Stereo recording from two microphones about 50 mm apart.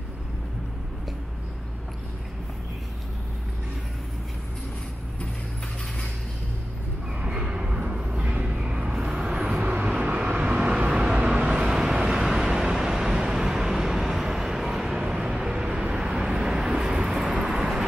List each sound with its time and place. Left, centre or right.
7.2 s vehicle: centre
9.6 s vehicle: right; by 17.8 s centre